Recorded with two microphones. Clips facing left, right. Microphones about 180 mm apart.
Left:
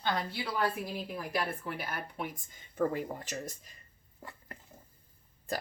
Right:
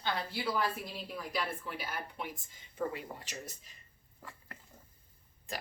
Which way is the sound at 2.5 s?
50° left (ahead or behind).